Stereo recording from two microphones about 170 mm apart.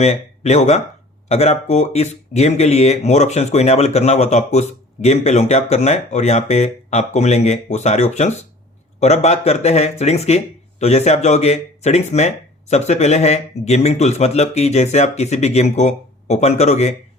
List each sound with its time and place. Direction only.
0.0 s speech: 40° left (ahead or behind)